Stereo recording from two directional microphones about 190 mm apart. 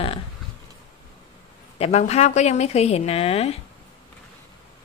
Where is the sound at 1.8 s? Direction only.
35° left (ahead or behind).